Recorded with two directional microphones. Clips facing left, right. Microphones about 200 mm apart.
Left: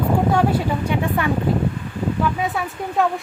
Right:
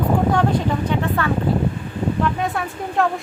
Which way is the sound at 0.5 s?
15° left (ahead or behind).